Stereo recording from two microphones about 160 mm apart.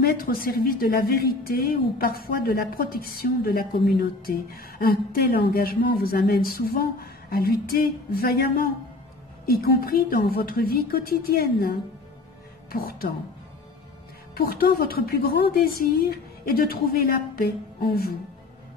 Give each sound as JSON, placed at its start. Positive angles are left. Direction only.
{"t": 0.0, "sound": "a woman's voice", "side_deg": 65}
{"t": 12.7, "sound": "a woman's voice", "side_deg": 65}
{"t": 14.3, "sound": "a woman's voice", "side_deg": 70}